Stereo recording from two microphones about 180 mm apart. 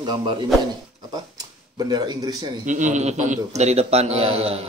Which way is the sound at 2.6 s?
45° right (ahead or behind).